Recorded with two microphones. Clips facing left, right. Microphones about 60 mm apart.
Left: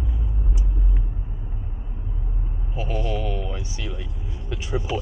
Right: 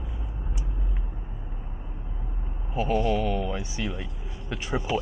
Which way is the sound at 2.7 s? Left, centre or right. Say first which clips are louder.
Right 4 dB; centre.